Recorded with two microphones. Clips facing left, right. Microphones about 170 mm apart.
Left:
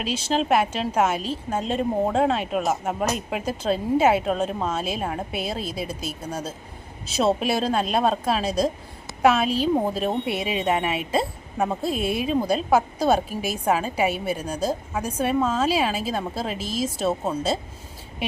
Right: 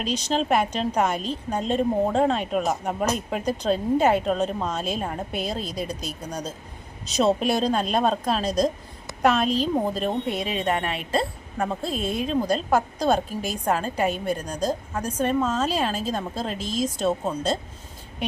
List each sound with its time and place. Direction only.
0.0 s a woman's voice: 5° left (ahead or behind)